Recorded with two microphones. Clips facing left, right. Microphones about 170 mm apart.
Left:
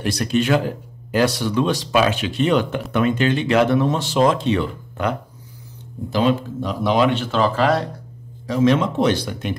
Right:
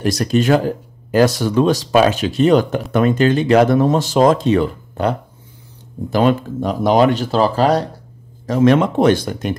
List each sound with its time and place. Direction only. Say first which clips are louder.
0.0 s speech: right 4 dB; 40° right (ahead or behind)
6.0 s speech: right 4 dB; 50° right (ahead or behind)
8.5 s speech: right 4 dB; 55° right (ahead or behind)